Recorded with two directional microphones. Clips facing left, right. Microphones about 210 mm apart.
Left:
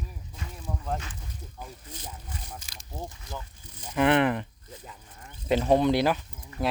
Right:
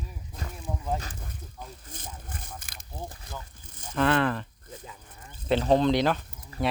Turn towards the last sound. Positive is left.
turn(degrees=15)  # may be behind; listen again after turning